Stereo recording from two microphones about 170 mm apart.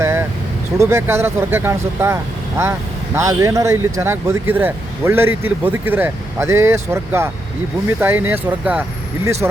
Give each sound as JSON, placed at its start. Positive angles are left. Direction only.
{"t": 0.0, "sound": "vehicle", "side_deg": -15}
{"t": 0.8, "sound": "speech", "side_deg": -15}
{"t": 3.2, "sound": "speech", "side_deg": -20}